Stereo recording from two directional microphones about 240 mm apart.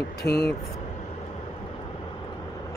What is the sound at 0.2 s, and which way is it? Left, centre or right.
Speech, left.